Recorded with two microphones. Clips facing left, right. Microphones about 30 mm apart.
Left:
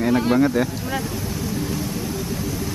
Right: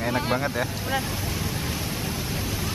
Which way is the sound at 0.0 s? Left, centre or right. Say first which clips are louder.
Left 7 dB; centre.